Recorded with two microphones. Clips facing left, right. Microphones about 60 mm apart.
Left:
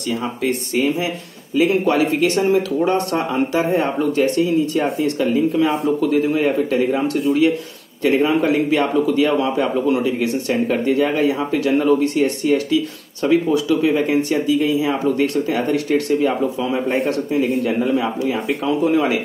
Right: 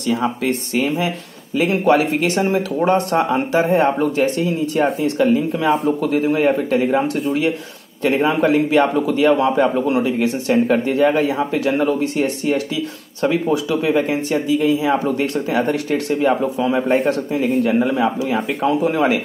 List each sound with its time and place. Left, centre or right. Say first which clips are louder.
0.0 s speech: right 2 dB; right
1.7 s a man's voice: right 5 dB; right
16.8 s a man's voice: right 2 dB; right
17.3 s a man's voice: right 1 dB; right